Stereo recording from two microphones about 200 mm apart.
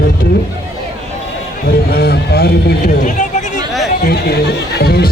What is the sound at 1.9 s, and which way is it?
Speech, 55° left (ahead or behind).